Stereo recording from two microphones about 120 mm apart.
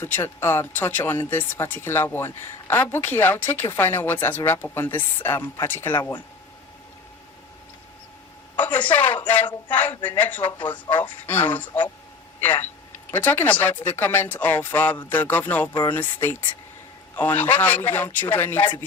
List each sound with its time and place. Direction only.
0.0 s speech: 20° left (ahead or behind)
8.5 s speech: 15° left (ahead or behind)